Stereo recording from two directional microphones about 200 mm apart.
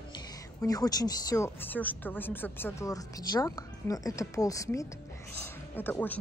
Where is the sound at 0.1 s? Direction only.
20° left (ahead or behind).